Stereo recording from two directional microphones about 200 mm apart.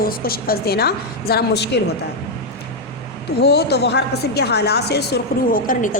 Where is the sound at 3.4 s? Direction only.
55° left (ahead or behind).